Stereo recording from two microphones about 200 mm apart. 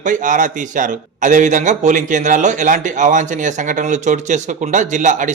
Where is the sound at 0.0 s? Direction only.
40° right (ahead or behind).